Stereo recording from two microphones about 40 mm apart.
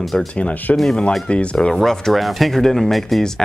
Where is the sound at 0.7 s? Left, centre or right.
Centre.